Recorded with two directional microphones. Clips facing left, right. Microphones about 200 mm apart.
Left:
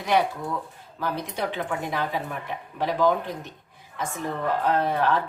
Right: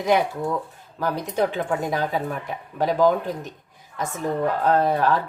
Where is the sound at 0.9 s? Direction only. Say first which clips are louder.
Right 6 dB; 45° right (ahead or behind).